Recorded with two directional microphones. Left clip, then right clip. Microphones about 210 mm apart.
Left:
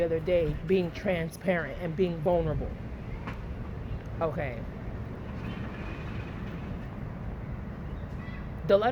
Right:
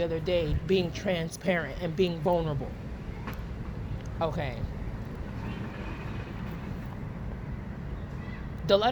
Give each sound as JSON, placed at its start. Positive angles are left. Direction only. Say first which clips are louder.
{"t": 0.0, "sound": "speech", "louder": "left 2 dB", "side_deg": -35}
{"t": 4.2, "sound": "speech", "louder": "even", "side_deg": -35}
{"t": 8.6, "sound": "speech", "louder": "even", "side_deg": -30}